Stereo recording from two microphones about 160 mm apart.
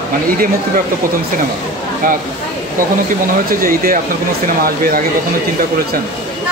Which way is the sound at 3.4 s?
60° right (ahead or behind).